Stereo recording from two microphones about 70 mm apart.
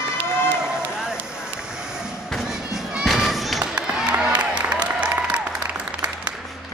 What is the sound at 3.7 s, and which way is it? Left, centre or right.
Applause, centre.